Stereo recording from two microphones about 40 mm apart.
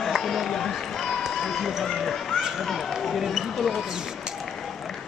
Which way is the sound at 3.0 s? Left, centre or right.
Centre.